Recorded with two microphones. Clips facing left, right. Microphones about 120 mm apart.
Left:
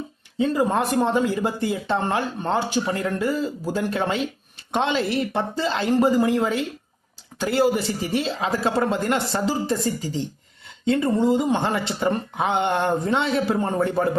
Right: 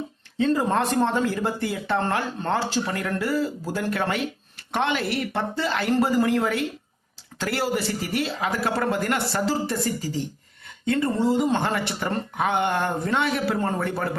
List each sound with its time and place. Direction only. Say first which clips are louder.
0.3 s speech: left 1 dB; 10° left (ahead or behind)